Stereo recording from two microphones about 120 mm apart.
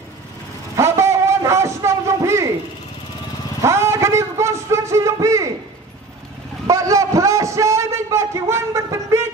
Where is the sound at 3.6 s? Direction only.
20° right (ahead or behind).